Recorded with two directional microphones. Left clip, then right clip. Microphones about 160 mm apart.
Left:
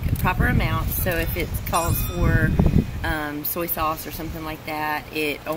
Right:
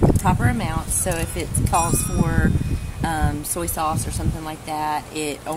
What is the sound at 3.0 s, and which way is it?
Speech, 20° right (ahead or behind).